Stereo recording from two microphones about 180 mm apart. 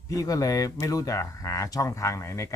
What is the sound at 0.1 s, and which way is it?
Speech, 20° left (ahead or behind).